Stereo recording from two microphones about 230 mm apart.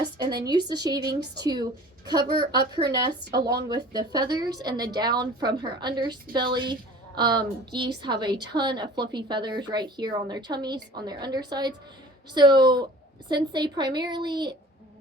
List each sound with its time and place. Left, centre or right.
0.0 s a woman's voice: centre